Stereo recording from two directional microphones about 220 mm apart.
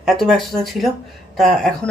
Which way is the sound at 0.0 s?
Centre (ahead or behind).